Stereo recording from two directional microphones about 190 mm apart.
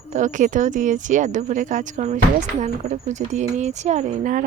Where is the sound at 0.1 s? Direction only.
40° right (ahead or behind).